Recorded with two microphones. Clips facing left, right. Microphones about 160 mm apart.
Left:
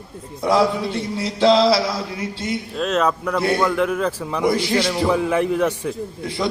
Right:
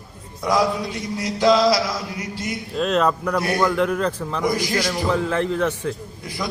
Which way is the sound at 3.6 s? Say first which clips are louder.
Even; centre (ahead or behind).